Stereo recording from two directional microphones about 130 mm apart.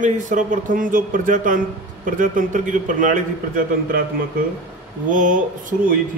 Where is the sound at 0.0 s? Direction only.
80° right.